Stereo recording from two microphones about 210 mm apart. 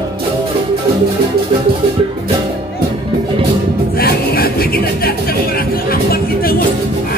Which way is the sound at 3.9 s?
45° left (ahead or behind).